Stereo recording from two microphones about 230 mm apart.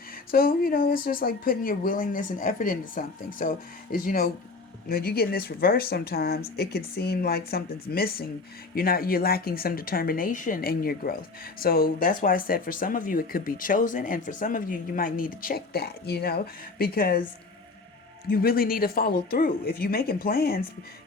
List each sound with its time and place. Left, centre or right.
0.3 s speech: left
18.3 s speech: left